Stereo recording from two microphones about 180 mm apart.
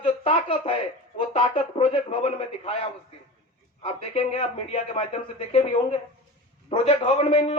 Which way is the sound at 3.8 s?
30° left (ahead or behind).